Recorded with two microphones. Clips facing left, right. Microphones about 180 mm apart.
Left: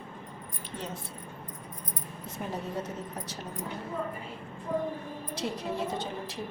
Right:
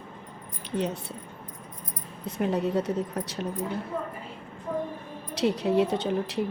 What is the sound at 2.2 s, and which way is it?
A woman's voice, 70° right (ahead or behind).